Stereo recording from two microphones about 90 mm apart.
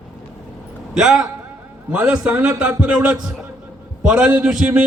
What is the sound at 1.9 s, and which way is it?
A man's voice, 15° right (ahead or behind).